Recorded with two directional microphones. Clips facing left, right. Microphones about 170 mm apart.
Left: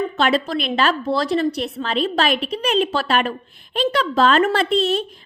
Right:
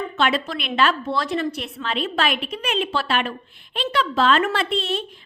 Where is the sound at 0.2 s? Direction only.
40° left (ahead or behind).